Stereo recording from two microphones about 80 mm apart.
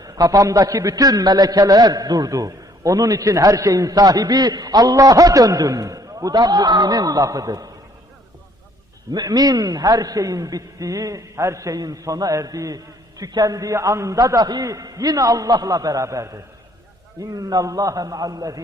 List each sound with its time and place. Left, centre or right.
0.0 s a man's voice: right
9.1 s a man's voice: right